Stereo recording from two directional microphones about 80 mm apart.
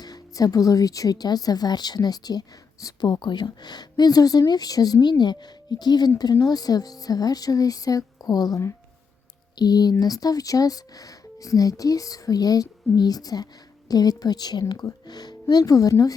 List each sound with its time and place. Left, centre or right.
0.0 s a woman's voice: left